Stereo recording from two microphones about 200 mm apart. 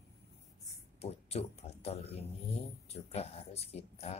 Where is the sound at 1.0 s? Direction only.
30° left (ahead or behind).